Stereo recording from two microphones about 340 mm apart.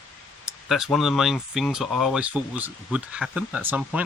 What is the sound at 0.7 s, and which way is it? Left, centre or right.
Speech, centre.